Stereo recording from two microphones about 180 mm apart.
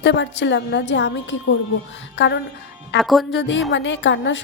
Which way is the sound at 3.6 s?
85° left.